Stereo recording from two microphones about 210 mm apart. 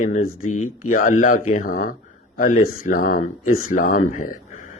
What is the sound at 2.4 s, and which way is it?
Speech, 35° left (ahead or behind).